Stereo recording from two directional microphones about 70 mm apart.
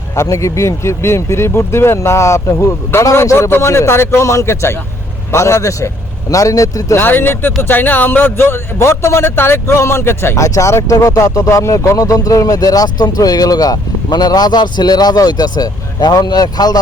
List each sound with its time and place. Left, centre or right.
0.2 s speech: left
7.0 s speech: left
10.3 s speech: left